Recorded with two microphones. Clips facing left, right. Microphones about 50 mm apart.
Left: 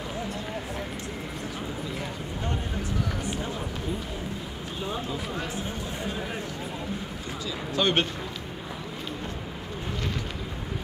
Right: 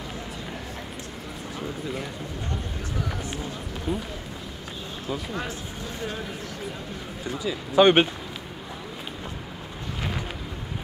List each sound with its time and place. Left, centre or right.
7.4 s speech: right